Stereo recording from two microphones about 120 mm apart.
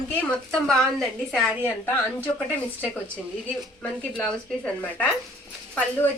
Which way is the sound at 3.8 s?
5° left (ahead or behind).